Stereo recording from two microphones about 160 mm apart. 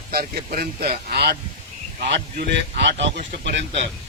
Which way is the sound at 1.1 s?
90° right.